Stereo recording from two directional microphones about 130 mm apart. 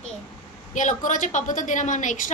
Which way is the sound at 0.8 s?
70° left (ahead or behind).